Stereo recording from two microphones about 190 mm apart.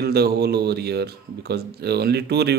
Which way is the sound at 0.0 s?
60° right (ahead or behind).